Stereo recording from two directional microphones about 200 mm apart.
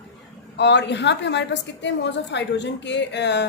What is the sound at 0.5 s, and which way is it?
A woman's voice, 60° left (ahead or behind).